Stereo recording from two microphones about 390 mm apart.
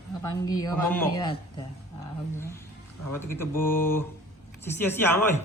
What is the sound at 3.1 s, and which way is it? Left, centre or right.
A man's voice, centre.